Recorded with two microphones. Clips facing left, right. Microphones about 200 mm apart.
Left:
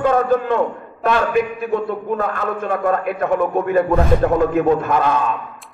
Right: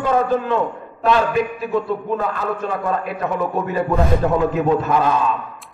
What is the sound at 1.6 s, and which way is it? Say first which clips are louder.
A man's voice: even; 50° left (ahead or behind).